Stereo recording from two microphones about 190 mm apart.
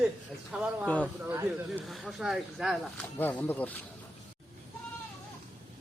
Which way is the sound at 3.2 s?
10° left (ahead or behind).